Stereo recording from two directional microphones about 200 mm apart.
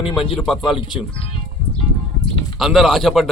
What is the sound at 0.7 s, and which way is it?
Speech, 25° left (ahead or behind).